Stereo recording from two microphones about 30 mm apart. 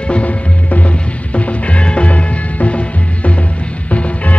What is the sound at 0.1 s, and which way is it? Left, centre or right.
Music, left.